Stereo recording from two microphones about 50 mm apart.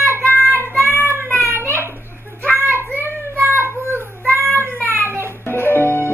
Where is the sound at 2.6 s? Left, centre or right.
Right.